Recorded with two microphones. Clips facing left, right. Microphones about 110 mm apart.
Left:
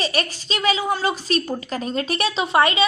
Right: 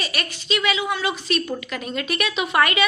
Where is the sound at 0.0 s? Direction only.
35° left (ahead or behind).